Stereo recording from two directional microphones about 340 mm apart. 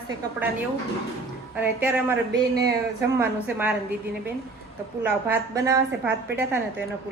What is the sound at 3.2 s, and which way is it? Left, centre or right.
Speech, centre.